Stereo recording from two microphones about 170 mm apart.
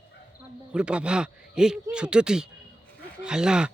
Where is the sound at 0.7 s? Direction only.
5° right (ahead or behind).